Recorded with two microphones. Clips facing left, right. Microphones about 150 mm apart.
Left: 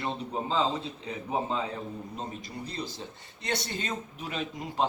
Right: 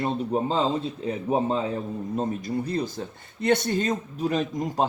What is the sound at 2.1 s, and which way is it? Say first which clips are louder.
Speech: right 11 dB; 50° right (ahead or behind).